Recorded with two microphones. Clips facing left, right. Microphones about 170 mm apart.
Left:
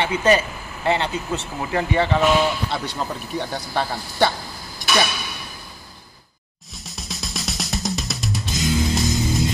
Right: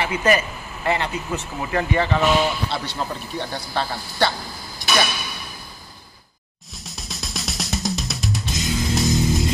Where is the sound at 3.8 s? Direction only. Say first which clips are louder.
Left 2 dB; 15° left (ahead or behind).